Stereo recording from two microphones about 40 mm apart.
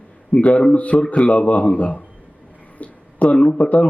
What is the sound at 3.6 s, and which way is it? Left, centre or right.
Speech, left.